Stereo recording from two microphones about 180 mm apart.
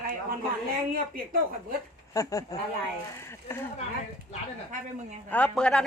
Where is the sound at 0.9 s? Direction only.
50° right (ahead or behind).